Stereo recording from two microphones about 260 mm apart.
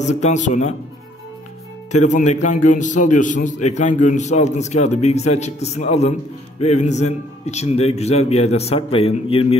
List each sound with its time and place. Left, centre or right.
0.0 s a man's voice: left
1.9 s a man's voice: left